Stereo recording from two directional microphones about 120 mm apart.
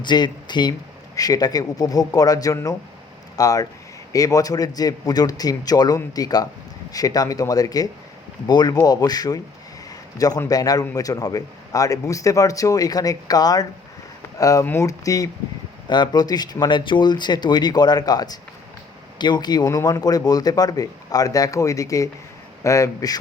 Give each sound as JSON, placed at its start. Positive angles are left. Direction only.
{"t": 0.0, "sound": "speech", "side_deg": 40}